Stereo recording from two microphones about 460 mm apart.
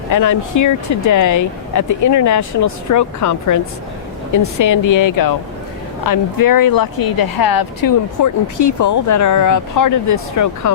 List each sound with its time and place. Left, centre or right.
0.1 s speech: left
4.6 s speech: left